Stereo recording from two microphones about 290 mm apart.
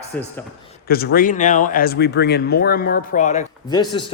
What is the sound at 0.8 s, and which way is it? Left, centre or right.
Speech, left.